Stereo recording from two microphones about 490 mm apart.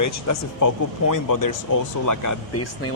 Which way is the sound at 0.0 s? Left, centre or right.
Left.